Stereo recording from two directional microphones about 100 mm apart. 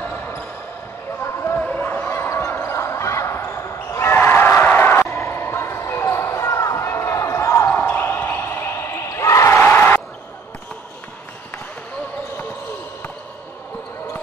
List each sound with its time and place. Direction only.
0.0 s basketball bounce: 20° left (ahead or behind)
1.6 s basketball bounce: 15° left (ahead or behind)